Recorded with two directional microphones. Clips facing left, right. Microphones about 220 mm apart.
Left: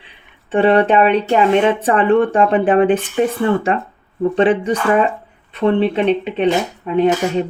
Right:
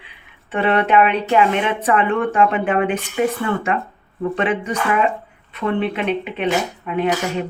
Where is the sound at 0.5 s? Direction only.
30° left (ahead or behind).